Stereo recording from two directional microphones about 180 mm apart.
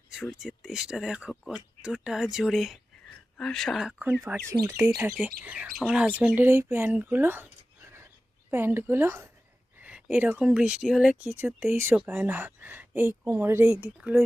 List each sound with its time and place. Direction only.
0.1 s speech: centre (ahead or behind)
7.9 s a sound: 15° right (ahead or behind)
9.8 s speech: 10° right (ahead or behind)